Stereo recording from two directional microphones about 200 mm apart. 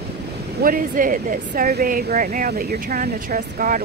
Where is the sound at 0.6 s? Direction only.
45° right (ahead or behind).